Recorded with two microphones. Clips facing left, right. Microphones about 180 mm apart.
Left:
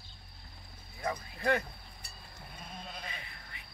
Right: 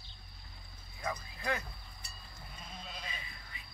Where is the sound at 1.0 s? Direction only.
60° left (ahead or behind).